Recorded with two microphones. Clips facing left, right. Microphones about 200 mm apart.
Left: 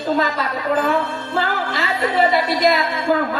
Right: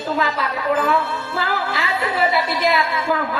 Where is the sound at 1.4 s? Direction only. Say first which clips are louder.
Left 2 dB; 40° left (ahead or behind).